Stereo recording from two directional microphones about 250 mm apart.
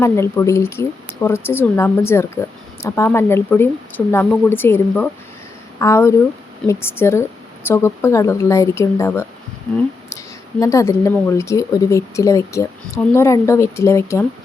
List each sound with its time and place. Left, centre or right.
0.0 s speech: centre